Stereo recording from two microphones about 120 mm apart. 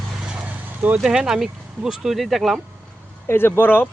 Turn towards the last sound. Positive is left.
turn(degrees=15)  # may be behind; listen again after turning